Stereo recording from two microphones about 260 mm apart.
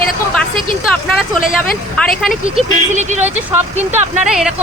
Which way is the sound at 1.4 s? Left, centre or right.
Left.